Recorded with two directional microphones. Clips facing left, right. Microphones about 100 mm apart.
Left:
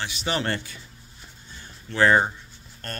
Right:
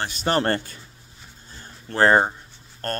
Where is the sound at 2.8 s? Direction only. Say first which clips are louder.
Right 8 dB; 45° right (ahead or behind).